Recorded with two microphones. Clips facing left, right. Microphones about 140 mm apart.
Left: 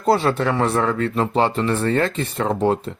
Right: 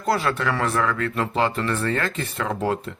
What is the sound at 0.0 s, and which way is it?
Speech, 30° left (ahead or behind).